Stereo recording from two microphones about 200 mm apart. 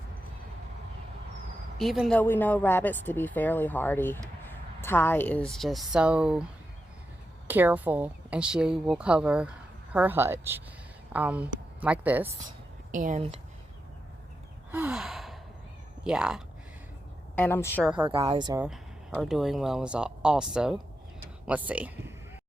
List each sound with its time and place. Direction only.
1.8 s speech: centre (ahead or behind)
7.4 s speech: 10° right (ahead or behind)
12.9 s speech: 40° right (ahead or behind)
14.7 s gasp: 5° right (ahead or behind)
16.0 s speech: 5° right (ahead or behind)
17.3 s speech: 10° left (ahead or behind)
17.8 s speech: 5° right (ahead or behind)
18.1 s speech: 25° right (ahead or behind)
18.6 s speech: 5° right (ahead or behind)